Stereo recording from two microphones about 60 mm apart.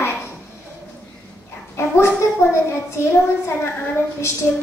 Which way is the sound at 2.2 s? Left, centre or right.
Left.